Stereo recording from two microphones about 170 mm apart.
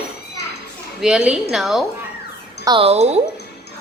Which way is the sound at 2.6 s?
25° right (ahead or behind).